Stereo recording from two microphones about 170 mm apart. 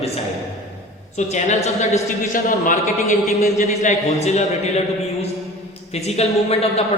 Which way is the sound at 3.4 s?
40° left (ahead or behind).